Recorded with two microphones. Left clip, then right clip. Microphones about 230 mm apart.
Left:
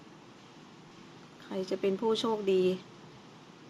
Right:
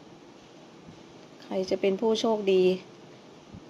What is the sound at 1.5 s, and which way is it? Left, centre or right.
Speech, centre.